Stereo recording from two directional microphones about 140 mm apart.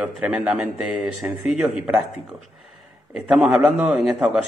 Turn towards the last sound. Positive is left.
turn(degrees=-5)  # may be behind; listen again after turning